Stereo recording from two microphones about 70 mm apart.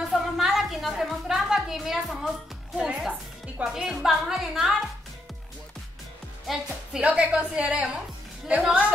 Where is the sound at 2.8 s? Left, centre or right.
Centre.